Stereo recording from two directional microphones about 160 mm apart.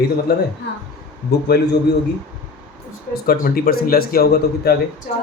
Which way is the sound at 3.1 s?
70° left (ahead or behind).